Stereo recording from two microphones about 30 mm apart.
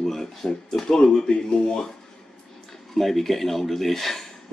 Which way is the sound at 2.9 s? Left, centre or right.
Centre.